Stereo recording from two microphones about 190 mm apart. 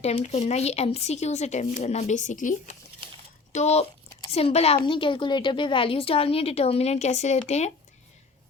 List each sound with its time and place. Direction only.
0.0 s a woman's voice: 35° left (ahead or behind)